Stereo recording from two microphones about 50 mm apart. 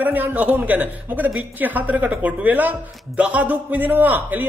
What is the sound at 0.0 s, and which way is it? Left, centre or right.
A man's voice, right.